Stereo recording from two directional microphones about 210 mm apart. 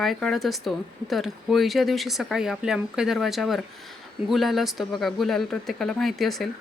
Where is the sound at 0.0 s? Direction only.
Centre (ahead or behind).